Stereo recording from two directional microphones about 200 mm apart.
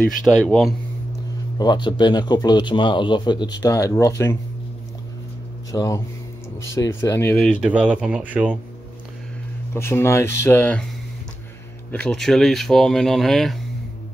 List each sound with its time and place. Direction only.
0.0 s speech: 5° left (ahead or behind)
1.6 s a man's voice: 20° left (ahead or behind)
5.7 s speech: 15° left (ahead or behind); by 8.5 s 5° right (ahead or behind)
9.8 s speech: 10° left (ahead or behind)
11.9 s speech: 5° left (ahead or behind)